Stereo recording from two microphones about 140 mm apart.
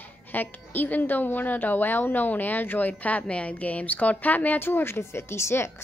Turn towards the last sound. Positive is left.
turn(degrees=20)  # may be behind; listen again after turning